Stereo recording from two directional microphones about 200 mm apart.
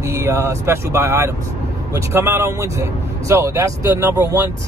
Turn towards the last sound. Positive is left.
turn(degrees=-10)  # may be behind; listen again after turning